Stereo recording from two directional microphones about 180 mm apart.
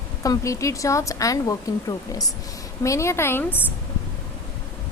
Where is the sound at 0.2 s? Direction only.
20° left (ahead or behind).